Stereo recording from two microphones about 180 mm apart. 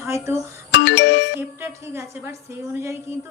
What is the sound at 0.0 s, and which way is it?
Speech, 15° right (ahead or behind).